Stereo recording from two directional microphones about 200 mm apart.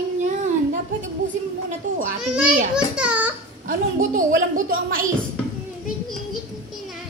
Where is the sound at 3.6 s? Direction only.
40° right (ahead or behind).